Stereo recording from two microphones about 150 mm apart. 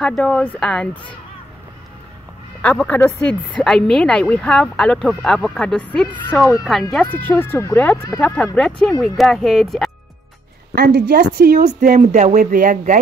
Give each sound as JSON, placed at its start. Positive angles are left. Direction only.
{"t": 0.0, "sound": "speech", "side_deg": 5}
{"t": 2.6, "sound": "speech", "side_deg": 10}
{"t": 10.7, "sound": "speech", "side_deg": -90}
{"t": 12.0, "sound": "speech", "side_deg": -50}